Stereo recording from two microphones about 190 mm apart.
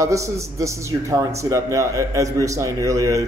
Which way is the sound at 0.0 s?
15° right (ahead or behind).